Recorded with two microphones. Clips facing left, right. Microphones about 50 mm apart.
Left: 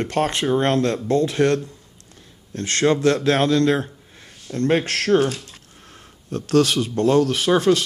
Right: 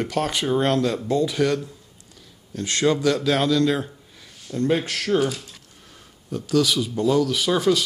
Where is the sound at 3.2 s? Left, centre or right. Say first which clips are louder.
Left 2 dB; left.